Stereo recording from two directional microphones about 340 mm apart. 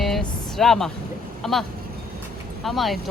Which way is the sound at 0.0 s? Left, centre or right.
Centre.